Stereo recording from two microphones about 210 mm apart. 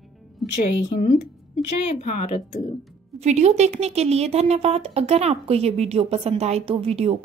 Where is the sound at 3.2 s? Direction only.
30° right (ahead or behind).